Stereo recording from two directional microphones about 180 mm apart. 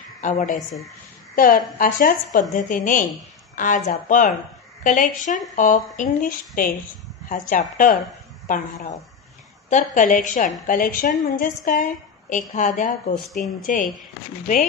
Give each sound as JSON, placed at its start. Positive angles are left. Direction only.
{"t": 0.2, "sound": "a woman's voice", "side_deg": 45}